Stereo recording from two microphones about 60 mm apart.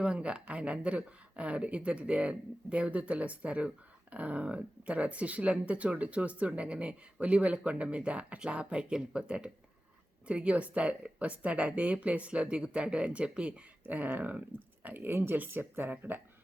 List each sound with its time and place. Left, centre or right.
0.0 s speech: centre
13.8 s speech: right